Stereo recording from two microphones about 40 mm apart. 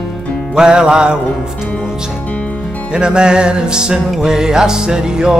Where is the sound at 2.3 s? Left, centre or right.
Left.